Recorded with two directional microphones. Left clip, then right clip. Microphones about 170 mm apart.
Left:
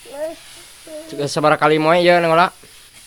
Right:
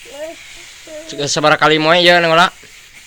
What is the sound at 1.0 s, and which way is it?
Speech, 15° left (ahead or behind).